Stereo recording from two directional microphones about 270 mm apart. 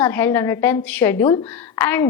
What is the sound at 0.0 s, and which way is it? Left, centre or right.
A woman's voice, centre.